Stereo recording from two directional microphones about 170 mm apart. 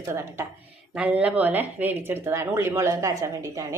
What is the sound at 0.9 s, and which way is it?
A woman's voice, 5° right (ahead or behind).